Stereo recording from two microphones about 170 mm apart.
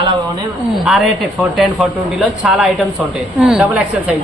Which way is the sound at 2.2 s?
Centre (ahead or behind).